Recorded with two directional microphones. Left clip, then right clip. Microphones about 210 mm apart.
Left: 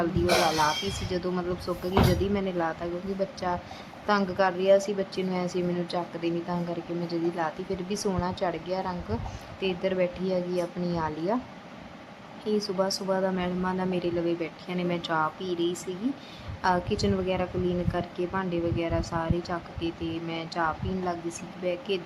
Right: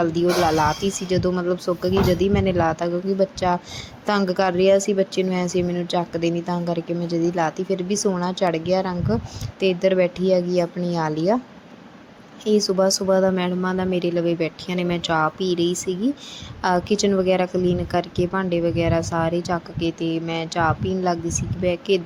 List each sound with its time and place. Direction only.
1.1 s speech: 20° right (ahead or behind)
12.5 s speech: 20° right (ahead or behind)